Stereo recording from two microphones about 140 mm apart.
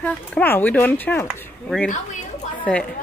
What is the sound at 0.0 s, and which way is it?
Speech, 10° left (ahead or behind).